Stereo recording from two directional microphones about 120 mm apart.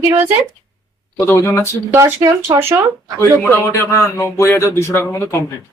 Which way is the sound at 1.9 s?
20° right (ahead or behind).